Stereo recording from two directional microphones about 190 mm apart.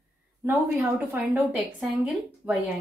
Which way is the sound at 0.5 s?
15° right (ahead or behind).